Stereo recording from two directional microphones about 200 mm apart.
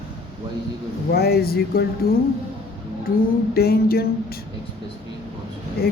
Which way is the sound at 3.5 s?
50° left (ahead or behind).